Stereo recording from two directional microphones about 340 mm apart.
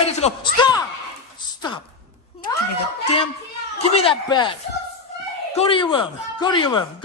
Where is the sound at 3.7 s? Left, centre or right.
Centre.